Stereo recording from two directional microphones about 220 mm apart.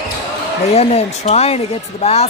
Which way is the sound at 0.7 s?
30° left (ahead or behind).